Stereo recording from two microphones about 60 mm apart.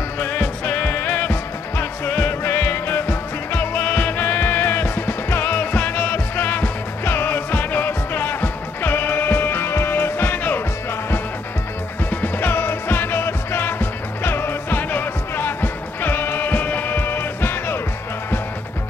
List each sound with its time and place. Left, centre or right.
0.2 s music: left
12.1 s music: left